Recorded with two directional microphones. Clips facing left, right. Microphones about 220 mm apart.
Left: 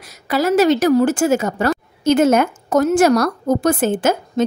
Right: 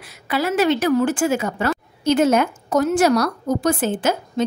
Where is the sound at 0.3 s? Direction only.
40° left (ahead or behind).